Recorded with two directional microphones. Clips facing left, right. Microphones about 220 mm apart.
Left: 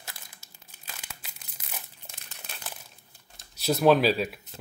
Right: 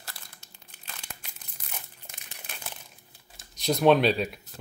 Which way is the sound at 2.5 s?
Centre (ahead or behind).